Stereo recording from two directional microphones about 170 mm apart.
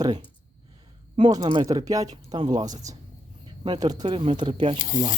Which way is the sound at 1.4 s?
30° right (ahead or behind).